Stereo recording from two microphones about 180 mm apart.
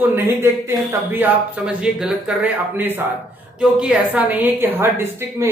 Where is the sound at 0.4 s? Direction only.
10° right (ahead or behind).